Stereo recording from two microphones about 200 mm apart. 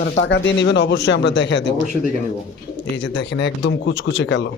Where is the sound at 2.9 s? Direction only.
60° left (ahead or behind).